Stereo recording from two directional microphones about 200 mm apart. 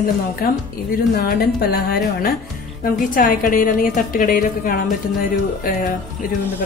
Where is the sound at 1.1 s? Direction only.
50° left (ahead or behind).